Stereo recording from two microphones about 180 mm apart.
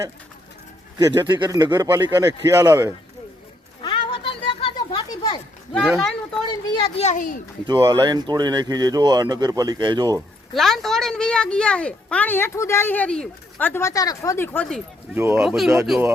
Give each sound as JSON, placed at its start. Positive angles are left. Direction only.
{"t": 0.9, "sound": "speech", "side_deg": -25}
{"t": 3.8, "sound": "cat", "side_deg": 25}
{"t": 5.7, "sound": "speech", "side_deg": 0}
{"t": 6.7, "sound": "speech", "side_deg": 30}
{"t": 7.7, "sound": "speech", "side_deg": -20}
{"t": 10.5, "sound": "a woman's voice", "side_deg": 0}
{"t": 15.1, "sound": "speech", "side_deg": -10}
{"t": 15.4, "sound": "speech", "side_deg": 0}